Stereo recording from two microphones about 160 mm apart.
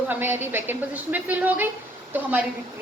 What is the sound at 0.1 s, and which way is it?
A woman's voice, 15° right (ahead or behind).